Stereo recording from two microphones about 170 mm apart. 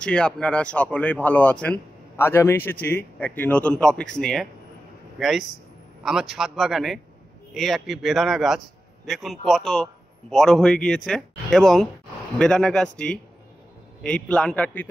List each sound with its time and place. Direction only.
0.0 s speech: 5° left (ahead or behind)
6.0 s a man's voice: 5° right (ahead or behind)